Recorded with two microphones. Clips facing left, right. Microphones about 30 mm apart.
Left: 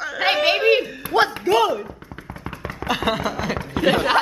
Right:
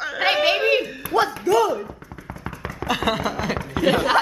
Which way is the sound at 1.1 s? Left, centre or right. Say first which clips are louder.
Left 1 dB; left.